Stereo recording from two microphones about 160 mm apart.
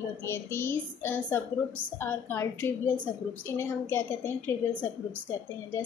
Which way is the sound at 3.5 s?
15° left (ahead or behind).